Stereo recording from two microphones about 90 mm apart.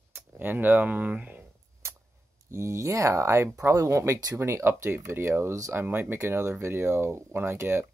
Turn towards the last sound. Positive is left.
turn(degrees=-30)  # may be behind; listen again after turning